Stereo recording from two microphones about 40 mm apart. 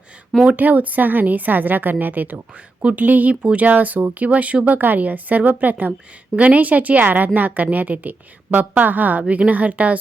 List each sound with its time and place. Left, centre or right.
0.4 s a woman's voice: right
4.6 s a woman's voice: right